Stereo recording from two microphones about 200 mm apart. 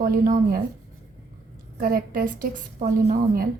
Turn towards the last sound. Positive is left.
turn(degrees=-45)  # may be behind; listen again after turning